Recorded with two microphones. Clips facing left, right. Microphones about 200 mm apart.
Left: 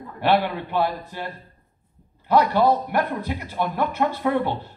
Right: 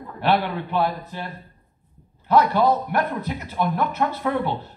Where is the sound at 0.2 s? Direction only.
10° left (ahead or behind).